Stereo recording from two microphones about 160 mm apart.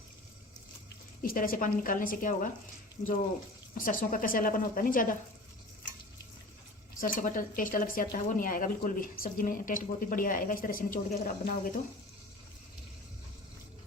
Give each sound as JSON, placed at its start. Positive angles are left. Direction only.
{"t": 1.2, "sound": "speech", "side_deg": 60}
{"t": 3.8, "sound": "speech", "side_deg": 60}
{"t": 7.0, "sound": "speech", "side_deg": 55}